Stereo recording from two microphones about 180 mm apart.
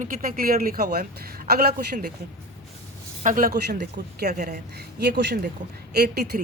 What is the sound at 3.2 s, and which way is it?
Speech, 50° right (ahead or behind).